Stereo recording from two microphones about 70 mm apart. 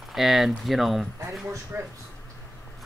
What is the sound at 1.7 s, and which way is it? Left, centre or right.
Speech, right.